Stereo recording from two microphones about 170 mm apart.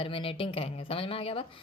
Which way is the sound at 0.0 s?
30° left (ahead or behind).